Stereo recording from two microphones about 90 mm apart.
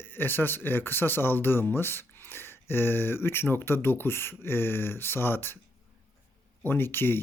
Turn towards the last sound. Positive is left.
turn(degrees=25)  # may be behind; listen again after turning